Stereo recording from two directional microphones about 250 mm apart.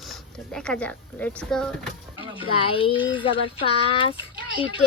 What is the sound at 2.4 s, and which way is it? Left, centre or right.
A woman's voice, left.